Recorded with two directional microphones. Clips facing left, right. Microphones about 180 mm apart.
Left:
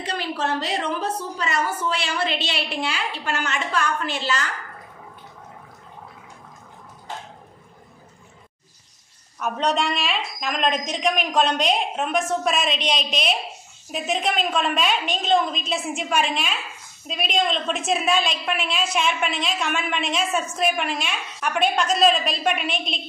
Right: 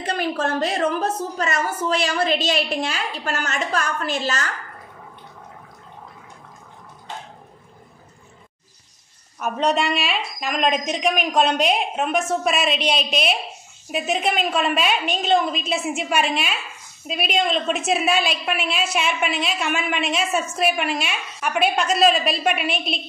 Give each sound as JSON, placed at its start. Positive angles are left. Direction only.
{"t": 0.0, "sound": "a woman's voice", "side_deg": -50}
{"t": 9.4, "sound": "a woman's voice", "side_deg": -5}